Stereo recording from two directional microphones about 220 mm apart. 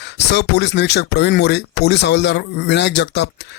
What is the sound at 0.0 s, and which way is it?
Speech, 50° left (ahead or behind).